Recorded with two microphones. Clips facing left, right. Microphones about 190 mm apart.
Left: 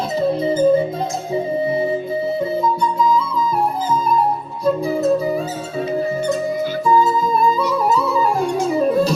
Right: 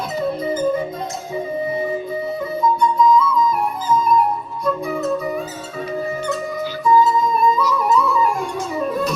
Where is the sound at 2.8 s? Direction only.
30° left (ahead or behind).